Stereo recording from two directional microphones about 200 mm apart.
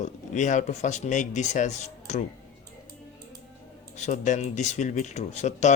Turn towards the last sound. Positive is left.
turn(degrees=35)  # may be behind; listen again after turning